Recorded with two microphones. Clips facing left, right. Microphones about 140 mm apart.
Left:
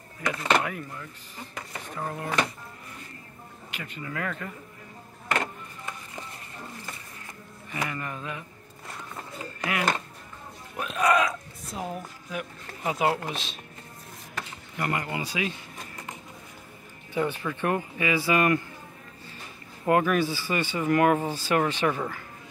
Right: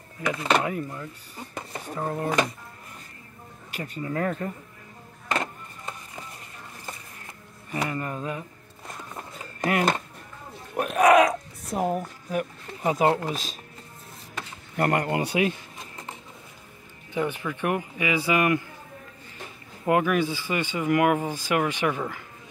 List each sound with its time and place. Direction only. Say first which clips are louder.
0.7 s speech: right 5 dB; 25° right (ahead or behind)
3.7 s speech: right 6 dB; 40° right (ahead or behind)
7.7 s speech: right 4 dB; 30° right (ahead or behind)
9.6 s music: right 5 dB; 45° right (ahead or behind)
10.8 s speech: right 6 dB; 60° right (ahead or behind)
11.2 s speech: right 6 dB; 50° right (ahead or behind)
14.8 s speech: right 6 dB; 50° right (ahead or behind)
17.1 s speech: even; 15° right (ahead or behind)
19.9 s speech: even; 15° right (ahead or behind)